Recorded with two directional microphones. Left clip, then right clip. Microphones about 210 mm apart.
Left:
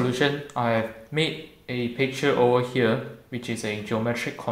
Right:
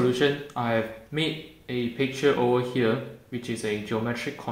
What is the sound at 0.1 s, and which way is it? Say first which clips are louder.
Speech: even; 35° left (ahead or behind).